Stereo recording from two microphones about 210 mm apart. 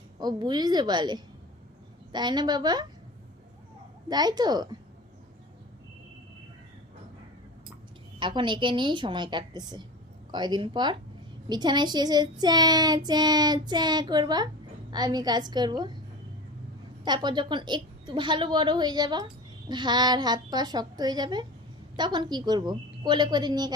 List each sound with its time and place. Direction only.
0.2 s a woman's voice: 20° right (ahead or behind)
4.1 s a woman's voice: 20° right (ahead or behind)
8.2 s a woman's voice: 20° right (ahead or behind)
17.0 s a woman's voice: 20° right (ahead or behind)